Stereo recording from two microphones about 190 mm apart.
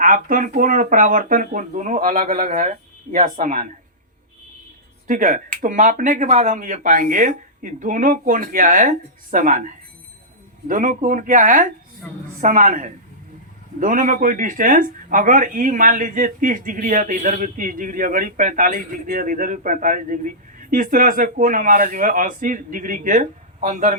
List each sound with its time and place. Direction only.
0.0 s speech: 45° right (ahead or behind)
5.0 s speech: 45° right (ahead or behind)